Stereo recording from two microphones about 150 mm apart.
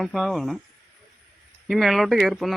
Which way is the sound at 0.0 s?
Centre (ahead or behind).